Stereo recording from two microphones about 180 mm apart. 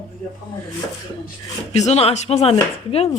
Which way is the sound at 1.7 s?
35° left (ahead or behind).